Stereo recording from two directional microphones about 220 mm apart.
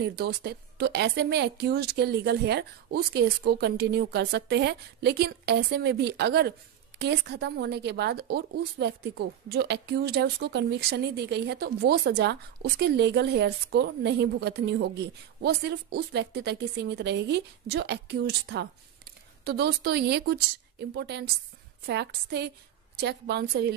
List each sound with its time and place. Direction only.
0.0 s a woman's voice: 45° right (ahead or behind)